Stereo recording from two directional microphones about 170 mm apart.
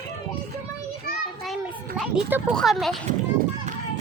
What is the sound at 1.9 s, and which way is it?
A child's voice, centre (ahead or behind).